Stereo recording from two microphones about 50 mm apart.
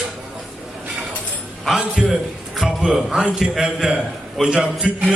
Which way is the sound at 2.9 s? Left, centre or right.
Centre.